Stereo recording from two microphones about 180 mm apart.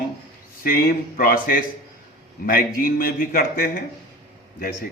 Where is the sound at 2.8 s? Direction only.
55° left (ahead or behind).